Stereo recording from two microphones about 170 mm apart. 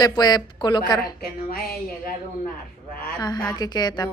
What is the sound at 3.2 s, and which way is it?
Speech, 20° left (ahead or behind).